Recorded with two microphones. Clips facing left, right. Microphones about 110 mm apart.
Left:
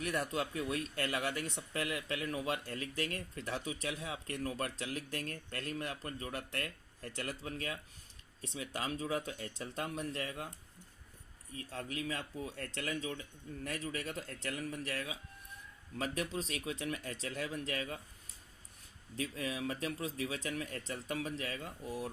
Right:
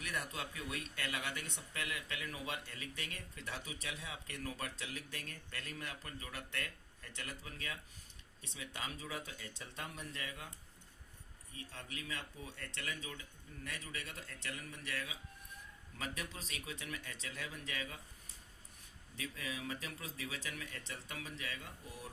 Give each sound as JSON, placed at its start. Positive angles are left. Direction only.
{"t": 0.0, "sound": "speech", "side_deg": 35}
{"t": 11.5, "sound": "speech", "side_deg": 40}
{"t": 19.1, "sound": "speech", "side_deg": 35}